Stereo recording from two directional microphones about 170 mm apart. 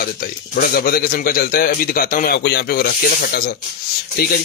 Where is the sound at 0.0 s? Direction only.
60° left (ahead or behind).